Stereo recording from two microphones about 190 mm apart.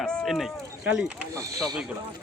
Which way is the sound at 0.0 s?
5° left (ahead or behind).